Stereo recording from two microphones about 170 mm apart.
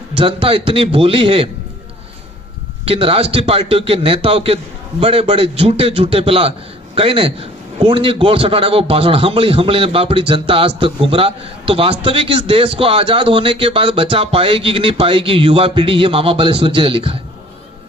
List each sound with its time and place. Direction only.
0.2 s a man's voice: 30° right (ahead or behind)
2.8 s a man's voice: 35° right (ahead or behind)